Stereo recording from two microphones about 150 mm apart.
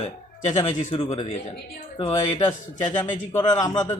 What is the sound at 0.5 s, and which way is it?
Speech, 35° left (ahead or behind).